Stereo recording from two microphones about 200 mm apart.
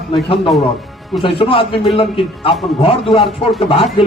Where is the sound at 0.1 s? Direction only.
30° left (ahead or behind).